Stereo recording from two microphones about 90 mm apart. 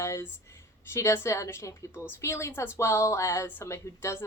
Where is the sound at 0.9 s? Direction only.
30° left (ahead or behind).